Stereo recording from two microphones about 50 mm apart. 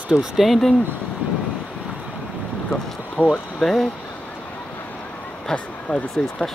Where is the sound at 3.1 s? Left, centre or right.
Left.